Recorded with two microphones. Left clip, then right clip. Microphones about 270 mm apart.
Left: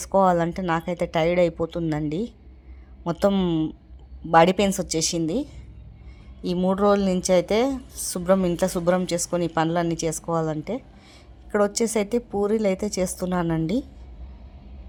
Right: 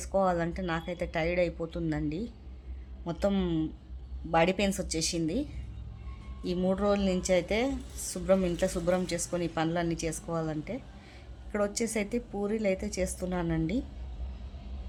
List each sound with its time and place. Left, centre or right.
0.0 s speech: left